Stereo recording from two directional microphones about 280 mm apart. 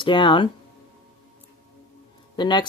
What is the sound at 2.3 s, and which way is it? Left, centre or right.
Speech, centre.